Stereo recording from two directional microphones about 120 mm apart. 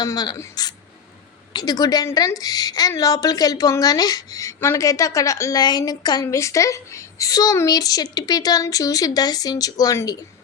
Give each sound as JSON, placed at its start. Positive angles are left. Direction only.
{"t": 0.0, "sound": "a woman's voice", "side_deg": 35}